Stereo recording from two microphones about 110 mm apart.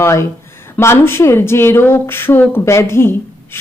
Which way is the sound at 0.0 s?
25° left (ahead or behind).